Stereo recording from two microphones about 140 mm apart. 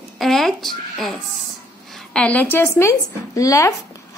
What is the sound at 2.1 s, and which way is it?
A woman's voice, 10° left (ahead or behind).